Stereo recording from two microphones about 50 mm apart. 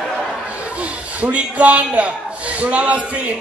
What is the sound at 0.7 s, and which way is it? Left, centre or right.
A man's voice, right.